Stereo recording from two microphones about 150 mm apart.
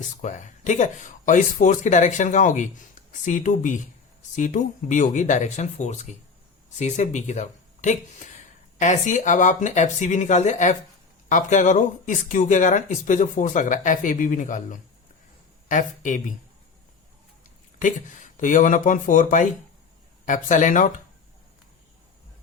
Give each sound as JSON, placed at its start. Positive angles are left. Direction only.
{"t": 0.0, "sound": "speech", "side_deg": 55}
{"t": 17.7, "sound": "speech", "side_deg": 60}